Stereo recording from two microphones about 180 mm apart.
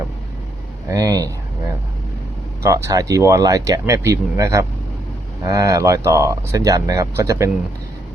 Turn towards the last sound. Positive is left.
turn(degrees=-15)  # may be behind; listen again after turning